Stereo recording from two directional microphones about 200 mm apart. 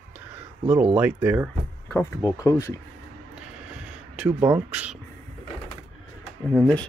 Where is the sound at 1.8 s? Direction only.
15° left (ahead or behind).